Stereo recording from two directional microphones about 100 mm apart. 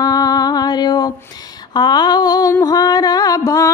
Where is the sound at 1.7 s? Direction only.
45° left (ahead or behind).